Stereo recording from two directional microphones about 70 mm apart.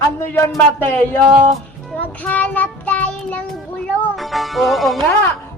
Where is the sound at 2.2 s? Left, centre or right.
Left.